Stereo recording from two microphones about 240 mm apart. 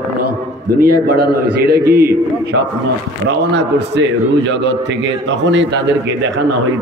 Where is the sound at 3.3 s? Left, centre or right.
Right.